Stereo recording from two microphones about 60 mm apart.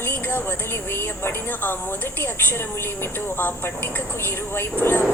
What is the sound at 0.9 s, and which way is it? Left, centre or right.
Speech, left.